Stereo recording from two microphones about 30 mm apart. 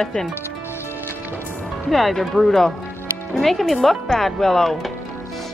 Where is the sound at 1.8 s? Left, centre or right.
Centre.